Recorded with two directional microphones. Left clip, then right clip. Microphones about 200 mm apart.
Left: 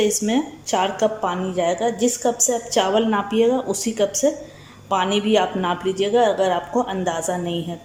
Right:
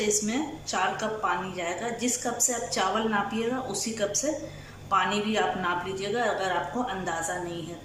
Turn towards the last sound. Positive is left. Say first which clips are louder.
# left 8 dB
turn(degrees=35)  # may be behind; listen again after turning